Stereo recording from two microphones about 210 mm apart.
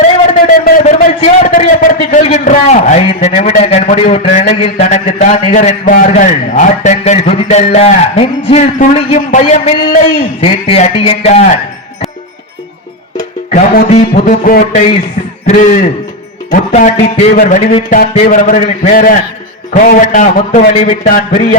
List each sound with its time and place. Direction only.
0.4 s a sound: 40° left (ahead or behind)
1.2 s a man's voice: 35° left (ahead or behind)
13.5 s a man's voice: 35° left (ahead or behind)